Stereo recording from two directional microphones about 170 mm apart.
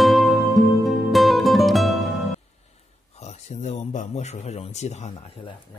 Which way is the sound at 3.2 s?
40° left (ahead or behind).